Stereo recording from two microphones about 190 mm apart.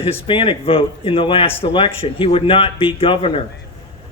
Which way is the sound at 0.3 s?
30° left (ahead or behind).